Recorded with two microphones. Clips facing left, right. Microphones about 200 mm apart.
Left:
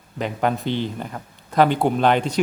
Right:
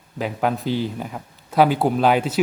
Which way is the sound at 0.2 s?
5° right (ahead or behind).